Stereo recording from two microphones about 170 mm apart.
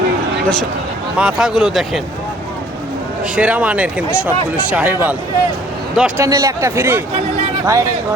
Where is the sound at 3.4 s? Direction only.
5° right (ahead or behind).